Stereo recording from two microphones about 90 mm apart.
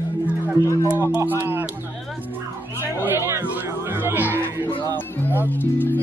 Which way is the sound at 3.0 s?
25° right (ahead or behind).